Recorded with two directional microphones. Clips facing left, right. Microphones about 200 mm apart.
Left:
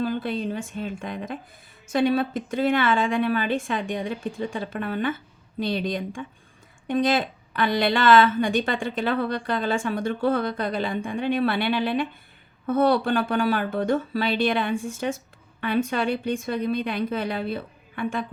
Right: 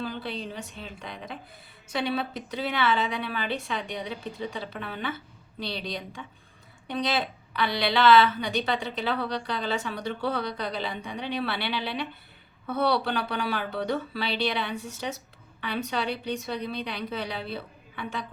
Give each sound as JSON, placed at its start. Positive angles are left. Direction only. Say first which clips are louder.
{"t": 0.0, "sound": "a woman's voice", "louder": "left 7 dB", "side_deg": 50}